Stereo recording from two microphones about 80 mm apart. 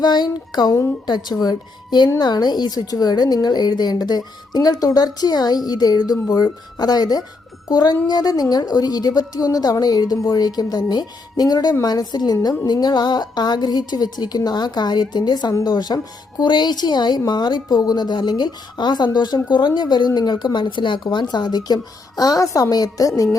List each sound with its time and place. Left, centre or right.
0.0 s a woman's voice: left
19.5 s a woman's voice: left